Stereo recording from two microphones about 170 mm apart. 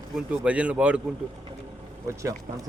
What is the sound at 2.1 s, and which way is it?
Speech, 15° right (ahead or behind).